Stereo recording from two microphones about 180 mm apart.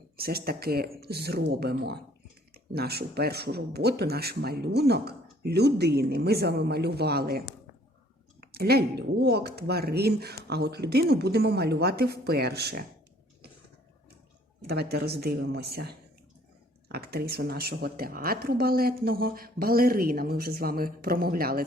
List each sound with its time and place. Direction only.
0.2 s speech: 60° right (ahead or behind)
14.7 s speech: 65° right (ahead or behind)